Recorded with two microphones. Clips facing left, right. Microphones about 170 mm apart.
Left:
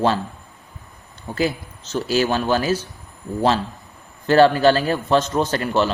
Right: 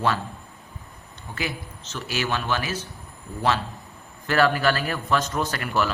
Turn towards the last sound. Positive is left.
turn(degrees=25)  # may be behind; listen again after turning